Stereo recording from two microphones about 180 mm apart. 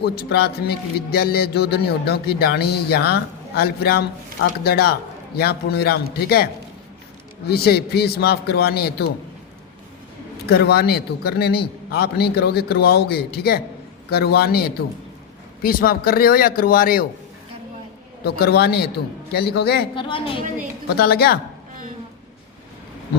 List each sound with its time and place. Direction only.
0.0 s a man's voice: 65° left (ahead or behind)
10.4 s a man's voice: 65° left (ahead or behind)
18.3 s a man's voice: 60° left (ahead or behind)
20.0 s a woman's voice: 30° left (ahead or behind)
20.9 s a man's voice: 60° left (ahead or behind)